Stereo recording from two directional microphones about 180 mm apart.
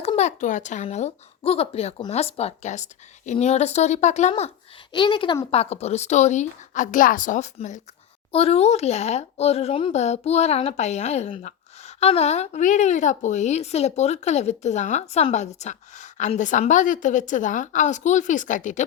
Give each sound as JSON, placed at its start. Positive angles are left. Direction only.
{"t": 0.0, "sound": "speech", "side_deg": 35}
{"t": 4.9, "sound": "speech", "side_deg": 25}